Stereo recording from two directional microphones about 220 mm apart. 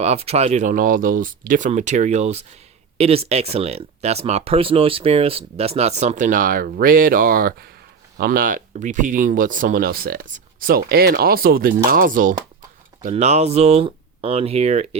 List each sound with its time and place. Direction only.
0.0 s speech: 30° right (ahead or behind)